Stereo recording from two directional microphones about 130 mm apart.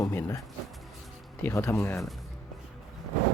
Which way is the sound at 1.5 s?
20° left (ahead or behind).